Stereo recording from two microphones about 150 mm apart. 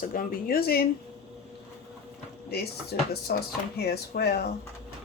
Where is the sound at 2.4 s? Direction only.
90° left.